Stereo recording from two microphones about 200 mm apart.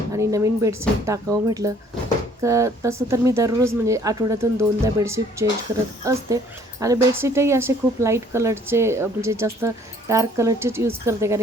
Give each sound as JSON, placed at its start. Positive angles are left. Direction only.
{"t": 0.1, "sound": "speech", "side_deg": -15}